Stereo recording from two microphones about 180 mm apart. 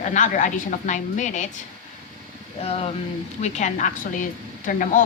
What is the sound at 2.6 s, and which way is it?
A woman's voice, 35° left (ahead or behind).